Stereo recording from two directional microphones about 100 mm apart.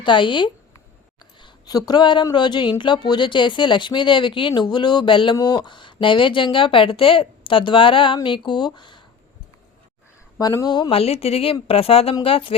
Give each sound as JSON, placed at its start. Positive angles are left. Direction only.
{"t": 0.0, "sound": "speech", "side_deg": 55}
{"t": 1.2, "sound": "a sound", "side_deg": 45}
{"t": 2.3, "sound": "speech", "side_deg": 50}
{"t": 5.4, "sound": "speech", "side_deg": 40}
{"t": 10.3, "sound": "speech", "side_deg": 35}
{"t": 10.8, "sound": "speech", "side_deg": 75}